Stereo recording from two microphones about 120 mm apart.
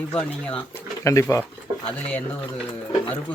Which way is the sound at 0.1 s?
10° left (ahead or behind).